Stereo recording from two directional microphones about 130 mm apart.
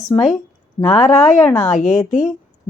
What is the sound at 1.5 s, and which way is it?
Speech, 5° left (ahead or behind).